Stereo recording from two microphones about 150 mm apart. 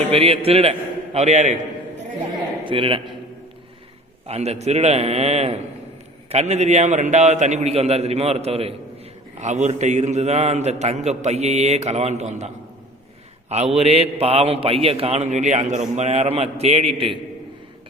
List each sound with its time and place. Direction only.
0.1 s a man's voice: 40° right (ahead or behind)
2.6 s a man's voice: 35° right (ahead or behind)
4.3 s a man's voice: 45° right (ahead or behind)
13.5 s a man's voice: 45° right (ahead or behind)